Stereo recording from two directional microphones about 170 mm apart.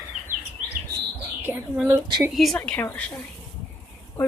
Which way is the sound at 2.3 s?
Centre (ahead or behind).